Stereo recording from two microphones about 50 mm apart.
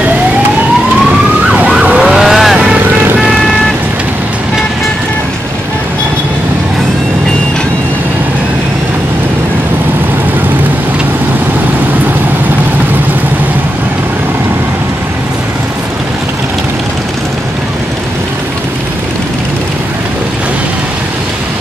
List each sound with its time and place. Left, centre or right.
2.1 s vehicle: centre
2.5 s vehicle: centre